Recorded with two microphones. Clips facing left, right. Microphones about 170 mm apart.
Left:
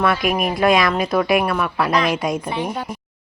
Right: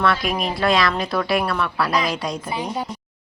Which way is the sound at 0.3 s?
15° left (ahead or behind).